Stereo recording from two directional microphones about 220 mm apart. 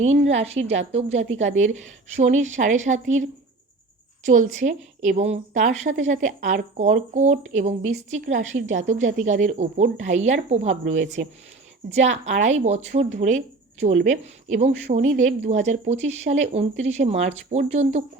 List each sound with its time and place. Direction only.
0.0 s a woman's voice: 30° right (ahead or behind)
4.3 s a woman's voice: 35° right (ahead or behind)
14.5 s a woman's voice: 30° right (ahead or behind)
15.1 s speech: 45° right (ahead or behind)
15.4 s a woman's voice: 30° right (ahead or behind)